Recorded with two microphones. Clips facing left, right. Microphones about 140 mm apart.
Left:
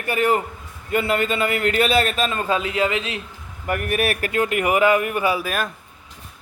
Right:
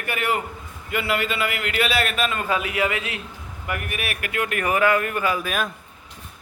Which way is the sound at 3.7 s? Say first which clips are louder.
Left 8 dB; 45° left (ahead or behind).